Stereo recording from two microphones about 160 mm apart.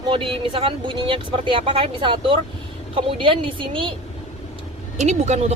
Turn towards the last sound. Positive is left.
turn(degrees=-45)  # may be behind; listen again after turning